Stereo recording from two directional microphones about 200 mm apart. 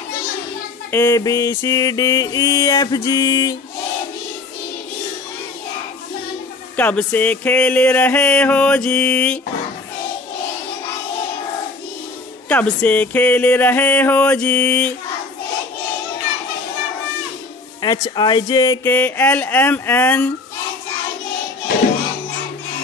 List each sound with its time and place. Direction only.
0.9 s mantra: 15° left (ahead or behind)
6.8 s mantra: 5° left (ahead or behind)
12.4 s mantra: 10° left (ahead or behind)
17.8 s mantra: 20° left (ahead or behind)